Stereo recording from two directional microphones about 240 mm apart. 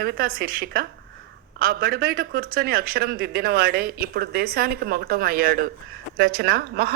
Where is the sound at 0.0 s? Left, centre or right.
Right.